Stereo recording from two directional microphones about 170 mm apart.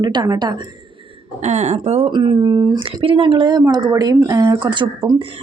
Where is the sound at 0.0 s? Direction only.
25° right (ahead or behind).